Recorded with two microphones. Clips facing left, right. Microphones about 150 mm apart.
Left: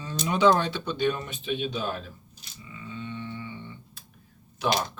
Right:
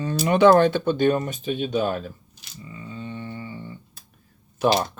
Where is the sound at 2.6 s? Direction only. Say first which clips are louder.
Right 2 dB; 40° right (ahead or behind).